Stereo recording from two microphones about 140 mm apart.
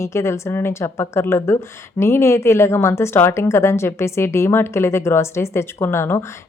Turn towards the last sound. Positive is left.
turn(degrees=20)  # may be behind; listen again after turning